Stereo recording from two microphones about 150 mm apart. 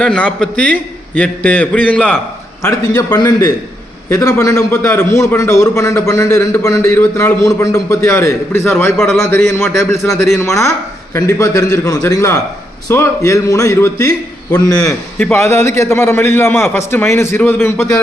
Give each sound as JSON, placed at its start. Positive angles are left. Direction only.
{"t": 0.0, "sound": "a man's voice", "side_deg": 5}
{"t": 2.6, "sound": "a man's voice", "side_deg": 25}